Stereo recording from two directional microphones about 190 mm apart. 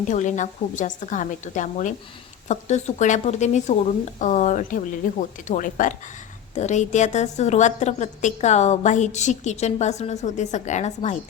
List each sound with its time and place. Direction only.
0.1 s a woman's voice: 40° left (ahead or behind)